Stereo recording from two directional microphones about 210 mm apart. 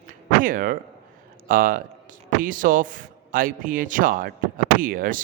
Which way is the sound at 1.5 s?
40° right (ahead or behind).